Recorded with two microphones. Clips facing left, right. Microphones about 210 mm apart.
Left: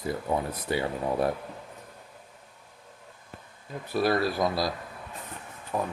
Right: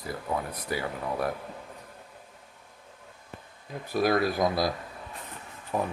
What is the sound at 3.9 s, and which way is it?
Speech, 15° right (ahead or behind).